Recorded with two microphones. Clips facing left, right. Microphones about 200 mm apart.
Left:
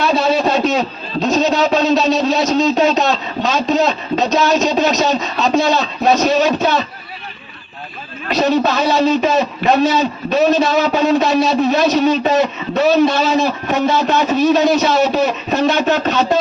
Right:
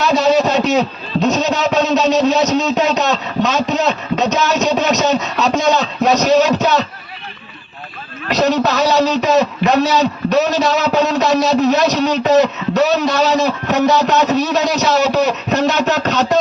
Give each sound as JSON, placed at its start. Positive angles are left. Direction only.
{"t": 0.1, "sound": "a man's voice", "side_deg": -75}
{"t": 8.3, "sound": "a man's voice", "side_deg": -70}